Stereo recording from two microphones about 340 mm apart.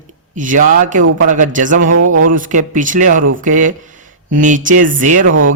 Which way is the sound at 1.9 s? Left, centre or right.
Right.